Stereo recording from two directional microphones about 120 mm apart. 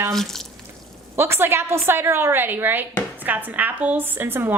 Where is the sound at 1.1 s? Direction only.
20° right (ahead or behind).